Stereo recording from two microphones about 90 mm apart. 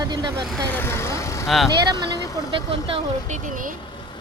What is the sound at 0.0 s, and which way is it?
Speech, 50° right (ahead or behind).